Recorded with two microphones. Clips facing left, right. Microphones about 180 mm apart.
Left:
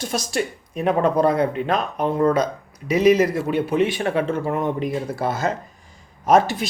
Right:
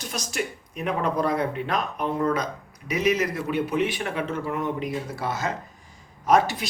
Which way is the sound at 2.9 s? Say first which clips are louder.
Left 8 dB; 30° left (ahead or behind).